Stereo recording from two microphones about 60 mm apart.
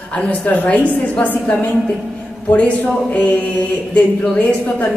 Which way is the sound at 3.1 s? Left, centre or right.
Left.